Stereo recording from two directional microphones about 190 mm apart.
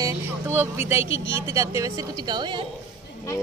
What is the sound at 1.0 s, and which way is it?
Speech, 80° left.